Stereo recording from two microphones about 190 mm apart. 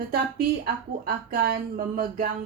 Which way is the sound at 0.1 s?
50° right (ahead or behind).